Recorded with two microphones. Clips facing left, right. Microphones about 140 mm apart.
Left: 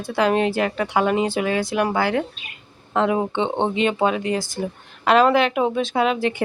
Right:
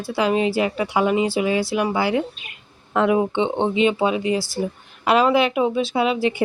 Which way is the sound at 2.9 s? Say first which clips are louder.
Right 2 dB; 25° left (ahead or behind).